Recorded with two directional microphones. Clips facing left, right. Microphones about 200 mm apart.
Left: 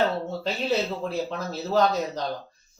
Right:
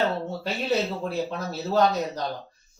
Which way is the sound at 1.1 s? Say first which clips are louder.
Even; centre (ahead or behind).